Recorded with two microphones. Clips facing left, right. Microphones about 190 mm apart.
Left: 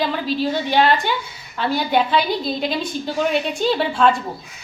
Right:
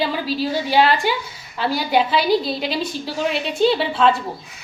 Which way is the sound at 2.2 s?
35° right (ahead or behind).